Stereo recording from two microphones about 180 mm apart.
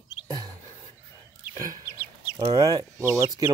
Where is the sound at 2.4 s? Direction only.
25° right (ahead or behind).